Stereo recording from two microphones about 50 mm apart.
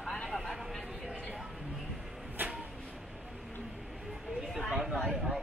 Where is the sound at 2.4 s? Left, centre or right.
Right.